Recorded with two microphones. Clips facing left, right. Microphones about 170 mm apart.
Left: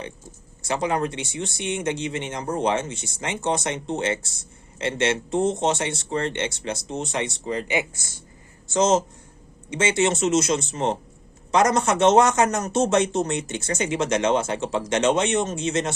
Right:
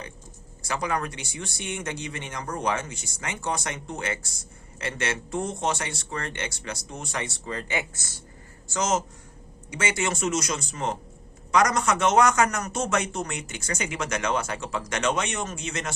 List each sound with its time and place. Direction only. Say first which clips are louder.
0.6 s speech: left 5 dB; 25° left (ahead or behind)